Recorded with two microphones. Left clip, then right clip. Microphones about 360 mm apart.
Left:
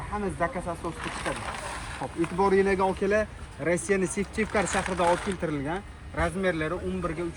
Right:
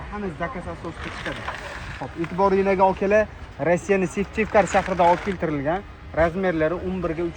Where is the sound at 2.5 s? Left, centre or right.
Centre.